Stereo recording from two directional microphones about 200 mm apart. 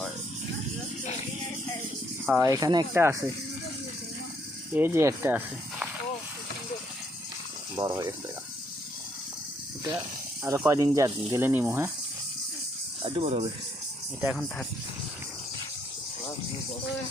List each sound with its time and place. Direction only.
2.4 s speech: 15° right (ahead or behind)
4.7 s speech: 10° right (ahead or behind)
7.8 s speech: 20° right (ahead or behind)
10.4 s speech: 15° right (ahead or behind)
13.0 s speech: 30° right (ahead or behind)